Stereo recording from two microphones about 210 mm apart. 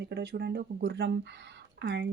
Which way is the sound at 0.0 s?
50° right (ahead or behind).